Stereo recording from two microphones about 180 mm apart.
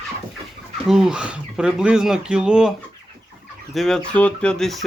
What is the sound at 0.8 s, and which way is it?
Speech, 5° right (ahead or behind).